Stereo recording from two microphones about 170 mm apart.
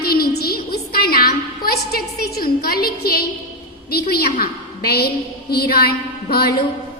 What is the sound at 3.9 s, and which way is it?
A woman's voice, 70° left (ahead or behind).